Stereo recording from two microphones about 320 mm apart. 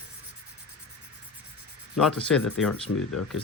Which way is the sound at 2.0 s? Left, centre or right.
Centre.